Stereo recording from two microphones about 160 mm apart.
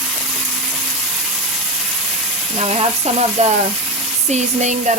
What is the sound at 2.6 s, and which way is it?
Speech, 40° right (ahead or behind).